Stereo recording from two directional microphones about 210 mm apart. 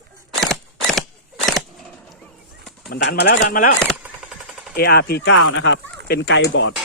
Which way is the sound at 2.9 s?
50° left (ahead or behind).